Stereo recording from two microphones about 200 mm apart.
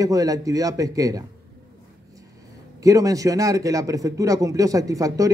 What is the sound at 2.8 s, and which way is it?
Speech, 15° right (ahead or behind).